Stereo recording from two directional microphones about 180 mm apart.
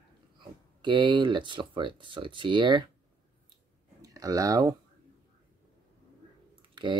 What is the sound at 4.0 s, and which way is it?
Speech, 20° right (ahead or behind).